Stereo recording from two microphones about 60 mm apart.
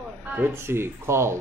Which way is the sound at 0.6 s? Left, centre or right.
Right.